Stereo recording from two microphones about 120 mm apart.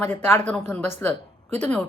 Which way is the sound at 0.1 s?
15° left (ahead or behind).